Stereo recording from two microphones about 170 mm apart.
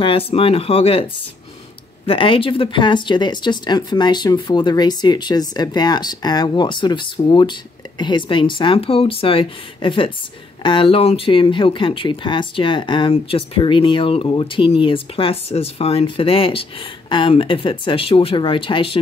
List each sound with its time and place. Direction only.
0.0 s speech: 35° left (ahead or behind)